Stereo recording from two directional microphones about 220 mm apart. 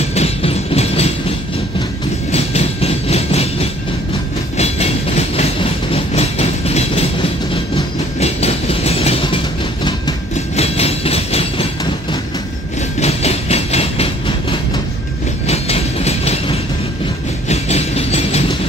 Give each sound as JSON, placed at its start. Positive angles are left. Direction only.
{"t": 0.1, "sound": "train", "side_deg": 30}
{"t": 2.3, "sound": "train", "side_deg": 30}